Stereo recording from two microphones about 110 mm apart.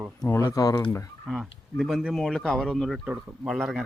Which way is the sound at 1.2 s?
5° right (ahead or behind).